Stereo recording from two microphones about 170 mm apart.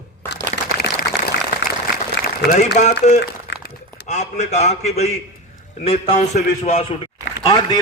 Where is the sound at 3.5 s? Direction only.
70° left (ahead or behind).